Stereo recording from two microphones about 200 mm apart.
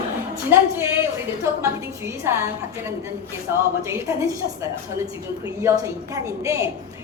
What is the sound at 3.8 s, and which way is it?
Speech, 15° right (ahead or behind).